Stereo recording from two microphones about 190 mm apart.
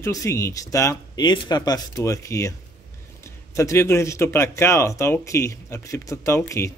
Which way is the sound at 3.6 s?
15° left (ahead or behind).